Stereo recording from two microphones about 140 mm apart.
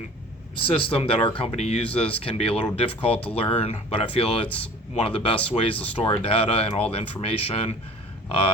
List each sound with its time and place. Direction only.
0.6 s speech: 40° left (ahead or behind)